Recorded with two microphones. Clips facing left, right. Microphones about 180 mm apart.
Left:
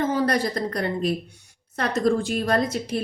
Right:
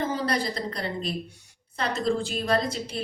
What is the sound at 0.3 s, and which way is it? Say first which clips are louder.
A woman's voice: left 4 dB; 55° left (ahead or behind).